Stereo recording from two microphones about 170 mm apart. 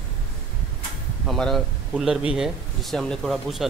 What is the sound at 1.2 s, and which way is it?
Speech, centre (ahead or behind).